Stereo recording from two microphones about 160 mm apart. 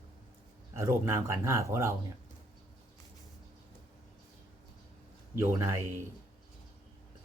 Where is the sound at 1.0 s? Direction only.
15° right (ahead or behind).